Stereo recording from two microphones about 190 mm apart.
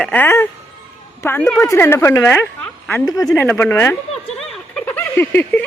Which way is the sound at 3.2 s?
5° left (ahead or behind).